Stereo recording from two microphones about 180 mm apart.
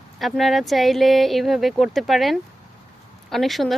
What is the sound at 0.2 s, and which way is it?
Speech, centre (ahead or behind).